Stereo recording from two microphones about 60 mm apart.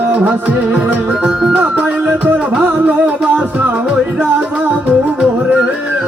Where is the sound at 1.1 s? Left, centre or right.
Centre.